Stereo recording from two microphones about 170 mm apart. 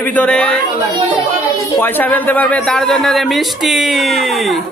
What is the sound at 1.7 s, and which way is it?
Speech, 10° left (ahead or behind).